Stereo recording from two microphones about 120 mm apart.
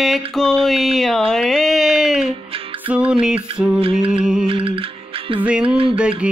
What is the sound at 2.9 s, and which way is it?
Mantra, 10° right (ahead or behind).